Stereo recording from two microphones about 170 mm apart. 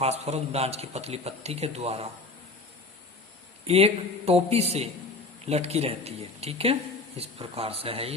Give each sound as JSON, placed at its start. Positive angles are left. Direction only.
{"t": 0.0, "sound": "a man's voice", "side_deg": -40}
{"t": 3.7, "sound": "a man's voice", "side_deg": -35}